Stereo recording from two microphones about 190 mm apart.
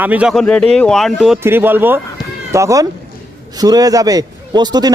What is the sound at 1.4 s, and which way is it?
A man's voice, 10° right (ahead or behind).